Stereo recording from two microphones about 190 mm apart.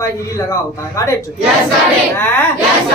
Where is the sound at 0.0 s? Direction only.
15° left (ahead or behind).